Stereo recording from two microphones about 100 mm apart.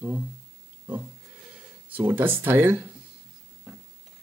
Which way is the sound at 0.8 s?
15° right (ahead or behind).